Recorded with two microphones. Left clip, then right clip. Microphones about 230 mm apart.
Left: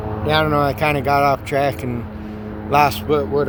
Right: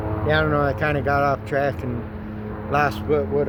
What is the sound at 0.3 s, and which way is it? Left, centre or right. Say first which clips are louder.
Speech: left 3 dB; left.